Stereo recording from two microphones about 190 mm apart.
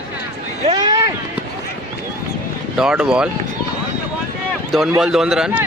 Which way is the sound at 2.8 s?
5° right (ahead or behind).